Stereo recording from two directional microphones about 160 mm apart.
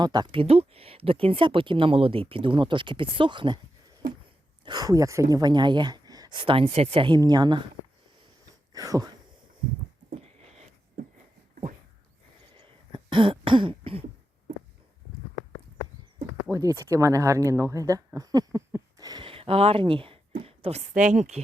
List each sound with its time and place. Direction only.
0.0 s speech: 25° right (ahead or behind)
4.6 s speech: 25° right (ahead or behind)
8.7 s speech: 20° right (ahead or behind)
10.2 s a sound: 40° right (ahead or behind)
12.5 s throat clearing: 30° right (ahead or behind)
16.5 s speech: 20° right (ahead or behind); by 21.4 s 45° right (ahead or behind)